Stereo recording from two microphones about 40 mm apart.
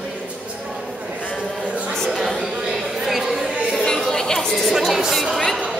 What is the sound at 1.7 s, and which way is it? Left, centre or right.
Speech, right.